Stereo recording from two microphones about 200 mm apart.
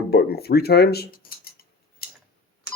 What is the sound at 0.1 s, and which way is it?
Speech, 50° left (ahead or behind).